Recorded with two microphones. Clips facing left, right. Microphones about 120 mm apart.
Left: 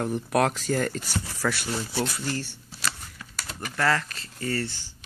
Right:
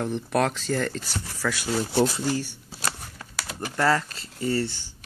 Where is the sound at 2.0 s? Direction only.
20° right (ahead or behind).